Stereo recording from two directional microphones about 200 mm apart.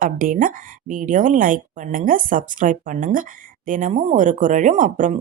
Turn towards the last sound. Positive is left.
turn(degrees=-40)  # may be behind; listen again after turning